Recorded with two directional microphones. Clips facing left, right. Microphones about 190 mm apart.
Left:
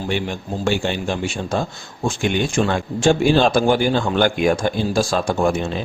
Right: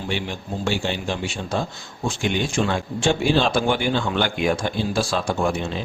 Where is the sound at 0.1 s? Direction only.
50° left (ahead or behind).